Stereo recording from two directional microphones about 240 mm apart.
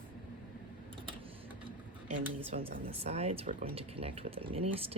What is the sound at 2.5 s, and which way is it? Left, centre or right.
Speech, right.